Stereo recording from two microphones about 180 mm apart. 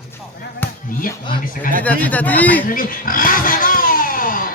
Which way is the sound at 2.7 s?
50° left (ahead or behind).